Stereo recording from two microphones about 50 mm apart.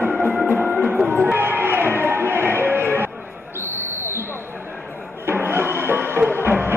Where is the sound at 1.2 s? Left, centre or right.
Right.